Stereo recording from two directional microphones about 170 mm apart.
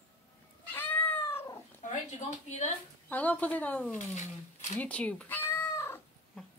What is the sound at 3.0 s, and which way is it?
Speech, 10° left (ahead or behind).